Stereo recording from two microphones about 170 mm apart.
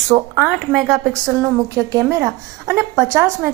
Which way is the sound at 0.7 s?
Centre (ahead or behind).